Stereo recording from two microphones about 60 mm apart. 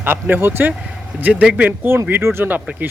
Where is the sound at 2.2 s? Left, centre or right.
Right.